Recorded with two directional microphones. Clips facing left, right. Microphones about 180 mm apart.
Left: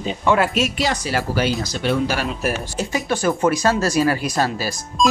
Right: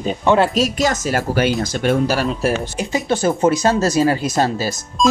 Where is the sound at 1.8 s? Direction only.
40° right (ahead or behind).